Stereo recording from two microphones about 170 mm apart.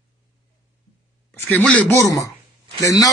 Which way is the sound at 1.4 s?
10° left (ahead or behind).